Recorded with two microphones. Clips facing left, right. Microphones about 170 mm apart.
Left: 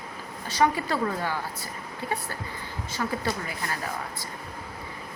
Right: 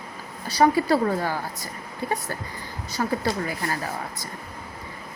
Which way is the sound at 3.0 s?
40° right (ahead or behind).